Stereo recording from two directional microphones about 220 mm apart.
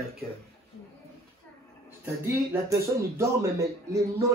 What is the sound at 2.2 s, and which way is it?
Speech, 15° right (ahead or behind).